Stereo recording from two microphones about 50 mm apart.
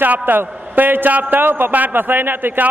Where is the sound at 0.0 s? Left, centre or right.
Right.